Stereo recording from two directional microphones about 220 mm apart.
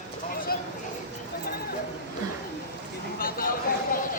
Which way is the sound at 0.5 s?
40° left (ahead or behind).